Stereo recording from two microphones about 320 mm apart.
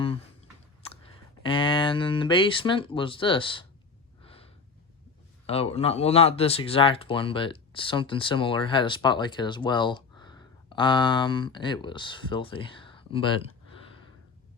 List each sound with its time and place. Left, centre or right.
0.8 s a sound: centre
1.5 s speech: centre
4.2 s gasp: centre
5.5 s speech: centre